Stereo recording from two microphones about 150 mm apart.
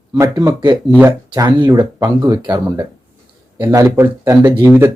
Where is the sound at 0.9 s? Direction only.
10° right (ahead or behind).